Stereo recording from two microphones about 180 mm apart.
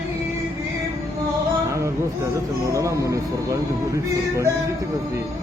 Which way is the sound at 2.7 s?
15° right (ahead or behind).